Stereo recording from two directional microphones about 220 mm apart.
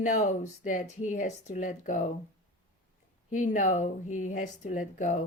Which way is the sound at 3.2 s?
35° left (ahead or behind).